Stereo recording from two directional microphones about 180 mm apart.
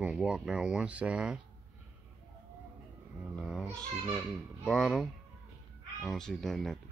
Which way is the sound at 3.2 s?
Centre (ahead or behind).